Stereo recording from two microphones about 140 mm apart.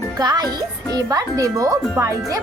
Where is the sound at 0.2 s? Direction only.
30° right (ahead or behind).